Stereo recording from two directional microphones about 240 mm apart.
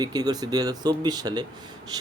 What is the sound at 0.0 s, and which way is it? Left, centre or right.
Speech, centre.